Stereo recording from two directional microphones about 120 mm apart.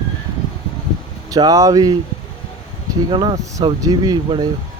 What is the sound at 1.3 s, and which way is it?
Speech, 30° right (ahead or behind).